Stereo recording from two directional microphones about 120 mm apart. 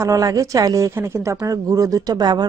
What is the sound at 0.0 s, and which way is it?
Speech, 25° right (ahead or behind).